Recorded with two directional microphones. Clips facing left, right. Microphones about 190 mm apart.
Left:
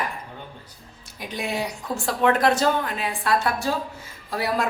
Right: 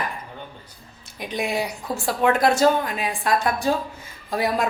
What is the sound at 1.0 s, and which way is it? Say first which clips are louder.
Speech: right 3 dB; 20° right (ahead or behind).